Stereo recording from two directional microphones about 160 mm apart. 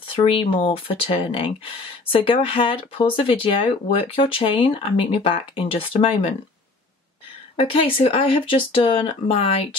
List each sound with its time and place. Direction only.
0.1 s speech: 35° left (ahead or behind)
2.4 s speech: 35° left (ahead or behind)
7.5 s speech: 35° left (ahead or behind)